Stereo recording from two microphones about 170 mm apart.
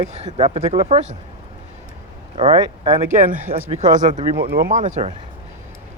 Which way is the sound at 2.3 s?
30° right (ahead or behind).